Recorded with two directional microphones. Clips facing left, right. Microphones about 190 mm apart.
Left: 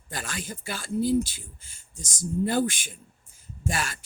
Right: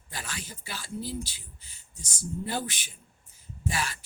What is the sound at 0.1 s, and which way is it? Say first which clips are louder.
A man's voice: left 5 dB; 45° left (ahead or behind).